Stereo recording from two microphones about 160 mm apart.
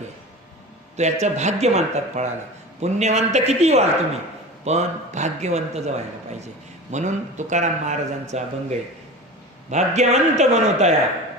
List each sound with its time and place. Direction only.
0.9 s a man's voice: 45° right (ahead or behind)